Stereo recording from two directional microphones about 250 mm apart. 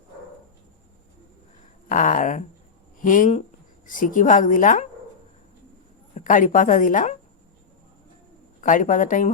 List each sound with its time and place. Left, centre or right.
1.9 s a woman's voice: left
6.1 s a woman's voice: left
8.6 s a woman's voice: left